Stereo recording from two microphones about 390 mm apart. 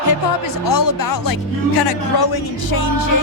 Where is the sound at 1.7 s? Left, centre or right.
Left.